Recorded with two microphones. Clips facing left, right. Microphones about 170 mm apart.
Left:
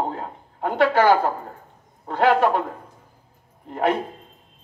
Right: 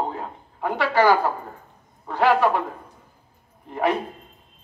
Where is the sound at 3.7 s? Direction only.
50° left (ahead or behind).